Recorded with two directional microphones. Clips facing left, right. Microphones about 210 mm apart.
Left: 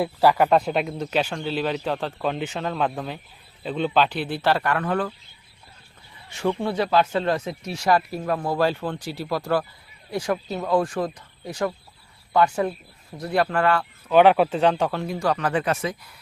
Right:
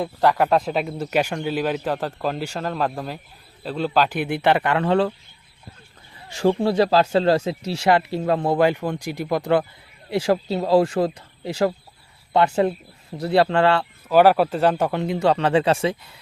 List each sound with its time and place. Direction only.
0.0 s speech: 5° left (ahead or behind)
4.2 s speech: 15° right (ahead or behind)
6.6 s speech: 35° right (ahead or behind)
14.1 s speech: 5° right (ahead or behind)
14.9 s speech: 20° right (ahead or behind)